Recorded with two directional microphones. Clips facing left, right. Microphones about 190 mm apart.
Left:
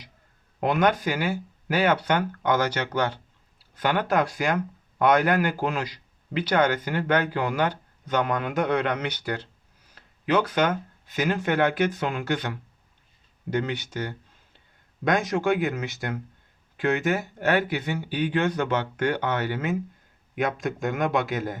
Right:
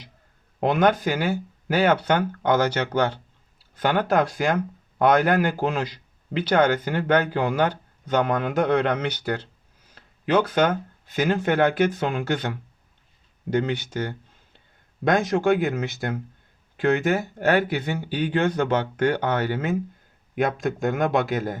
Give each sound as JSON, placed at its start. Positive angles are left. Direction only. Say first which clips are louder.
{"t": 0.6, "sound": "a man's voice", "louder": "right 2 dB", "side_deg": -25}